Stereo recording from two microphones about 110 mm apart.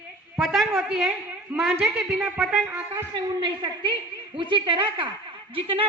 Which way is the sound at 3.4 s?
45° right (ahead or behind).